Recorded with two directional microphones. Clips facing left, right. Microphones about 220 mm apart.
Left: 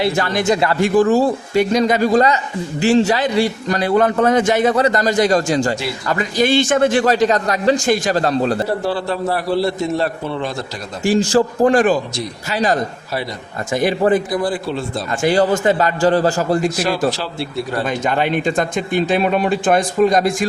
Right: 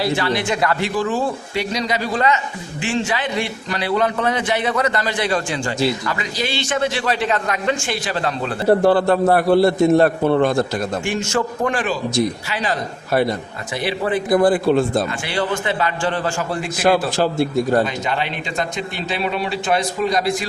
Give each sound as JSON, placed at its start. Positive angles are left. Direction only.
{"t": 0.2, "sound": "a man's voice", "side_deg": 45}
{"t": 8.8, "sound": "a man's voice", "side_deg": -55}
{"t": 11.0, "sound": "a man's voice", "side_deg": 35}
{"t": 13.8, "sound": "a man's voice", "side_deg": 45}
{"t": 14.3, "sound": "a man's voice", "side_deg": -55}
{"t": 15.2, "sound": "a man's voice", "side_deg": 40}
{"t": 18.0, "sound": "a man's voice", "side_deg": 50}